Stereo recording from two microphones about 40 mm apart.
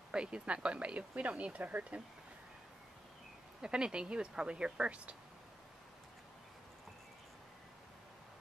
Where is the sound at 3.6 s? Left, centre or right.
Right.